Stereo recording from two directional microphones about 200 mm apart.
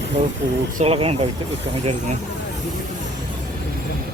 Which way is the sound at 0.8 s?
30° right (ahead or behind).